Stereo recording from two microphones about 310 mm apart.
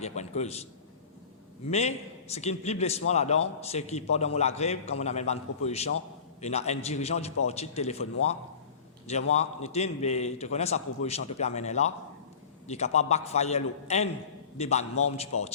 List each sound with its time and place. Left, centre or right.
0.0 s a man's voice: left
9.3 s a man's voice: left